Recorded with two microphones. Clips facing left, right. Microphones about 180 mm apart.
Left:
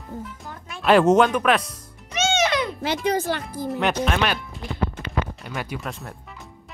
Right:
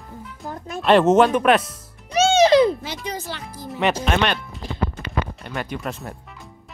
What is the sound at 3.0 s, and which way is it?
Speech, 55° left (ahead or behind).